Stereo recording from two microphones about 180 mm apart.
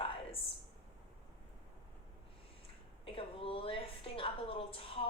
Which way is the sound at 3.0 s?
30° left (ahead or behind).